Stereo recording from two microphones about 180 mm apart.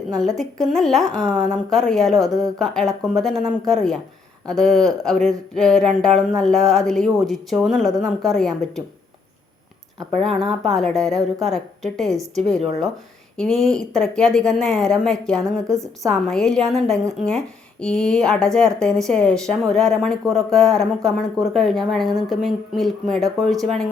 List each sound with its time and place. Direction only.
0.1 s a woman's voice: centre (ahead or behind)
10.2 s a woman's voice: centre (ahead or behind)
15.6 s a woman's voice: 15° right (ahead or behind)
16.0 s a woman's voice: centre (ahead or behind)